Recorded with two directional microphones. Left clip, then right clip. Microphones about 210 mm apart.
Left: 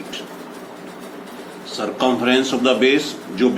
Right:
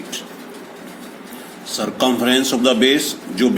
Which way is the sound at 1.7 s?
50° right (ahead or behind).